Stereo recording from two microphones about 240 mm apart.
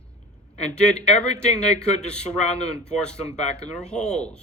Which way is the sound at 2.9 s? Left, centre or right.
Centre.